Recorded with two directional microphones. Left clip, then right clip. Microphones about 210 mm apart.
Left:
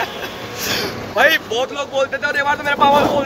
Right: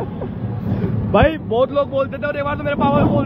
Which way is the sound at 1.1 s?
30° right (ahead or behind).